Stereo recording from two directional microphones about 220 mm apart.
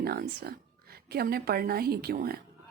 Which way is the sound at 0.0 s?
45° right (ahead or behind).